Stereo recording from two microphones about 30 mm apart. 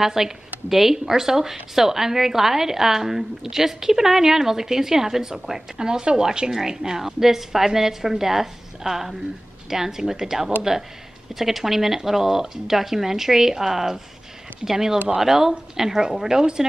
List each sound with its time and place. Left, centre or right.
0.0 s a woman's voice: centre